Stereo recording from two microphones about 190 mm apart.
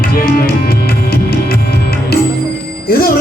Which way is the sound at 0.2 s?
50° left (ahead or behind).